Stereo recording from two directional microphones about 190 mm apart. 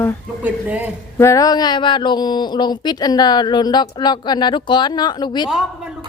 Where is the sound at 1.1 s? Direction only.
15° left (ahead or behind).